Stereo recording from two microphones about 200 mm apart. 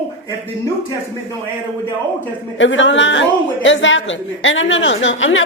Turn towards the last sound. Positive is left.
turn(degrees=70)  # may be behind; listen again after turning